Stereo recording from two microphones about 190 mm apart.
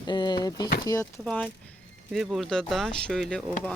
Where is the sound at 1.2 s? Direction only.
10° left (ahead or behind).